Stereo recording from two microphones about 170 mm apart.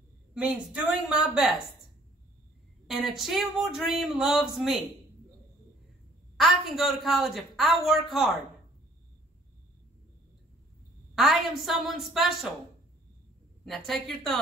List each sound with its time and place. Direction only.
0.3 s speech: 5° right (ahead or behind)
2.9 s speech: centre (ahead or behind)
6.3 s a woman's voice: centre (ahead or behind)
11.1 s speech: centre (ahead or behind)
13.7 s speech: centre (ahead or behind)